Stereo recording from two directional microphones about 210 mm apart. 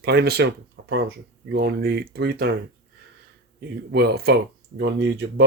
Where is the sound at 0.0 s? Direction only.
50° right (ahead or behind).